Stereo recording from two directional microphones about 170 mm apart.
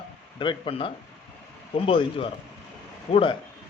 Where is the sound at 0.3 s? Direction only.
30° left (ahead or behind).